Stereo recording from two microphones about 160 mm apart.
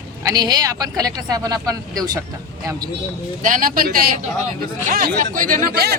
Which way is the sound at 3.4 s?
55° right (ahead or behind).